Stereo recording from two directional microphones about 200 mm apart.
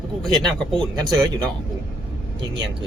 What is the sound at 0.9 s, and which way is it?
Speech, 20° right (ahead or behind).